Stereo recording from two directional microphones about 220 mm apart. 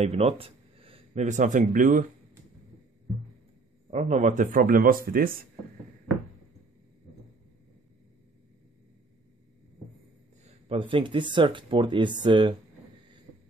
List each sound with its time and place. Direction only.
0.0 s speech: 30° right (ahead or behind)
3.9 s speech: 30° right (ahead or behind)
10.4 s speech: 25° right (ahead or behind)